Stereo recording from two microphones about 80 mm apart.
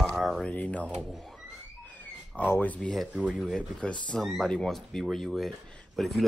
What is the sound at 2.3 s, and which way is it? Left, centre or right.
Speech, left.